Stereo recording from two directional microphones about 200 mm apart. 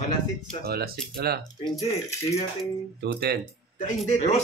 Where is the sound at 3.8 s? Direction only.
35° left (ahead or behind).